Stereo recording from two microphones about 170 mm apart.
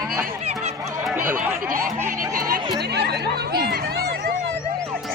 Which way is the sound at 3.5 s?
70° right (ahead or behind).